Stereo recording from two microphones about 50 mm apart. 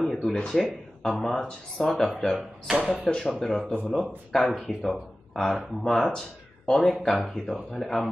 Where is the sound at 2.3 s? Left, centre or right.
Centre.